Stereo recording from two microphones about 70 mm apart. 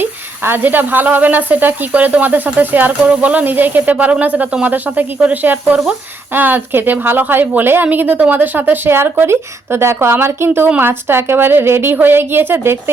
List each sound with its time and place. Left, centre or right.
0.0 s a woman's voice: right